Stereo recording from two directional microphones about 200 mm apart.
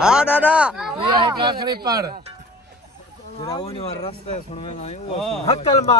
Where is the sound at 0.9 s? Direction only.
25° right (ahead or behind).